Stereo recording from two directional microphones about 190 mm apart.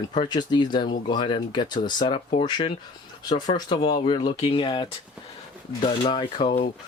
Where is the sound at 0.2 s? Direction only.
25° left (ahead or behind).